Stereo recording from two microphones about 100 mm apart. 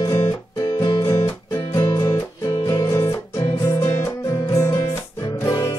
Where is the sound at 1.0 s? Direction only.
30° left (ahead or behind).